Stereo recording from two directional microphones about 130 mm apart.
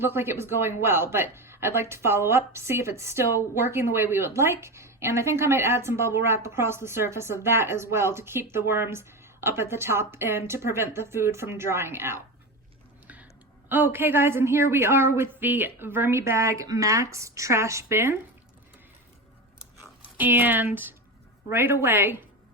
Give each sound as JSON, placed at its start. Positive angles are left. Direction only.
{"t": 0.0, "sound": "speech", "side_deg": -20}
{"t": 13.7, "sound": "speech", "side_deg": -15}
{"t": 20.1, "sound": "speech", "side_deg": -15}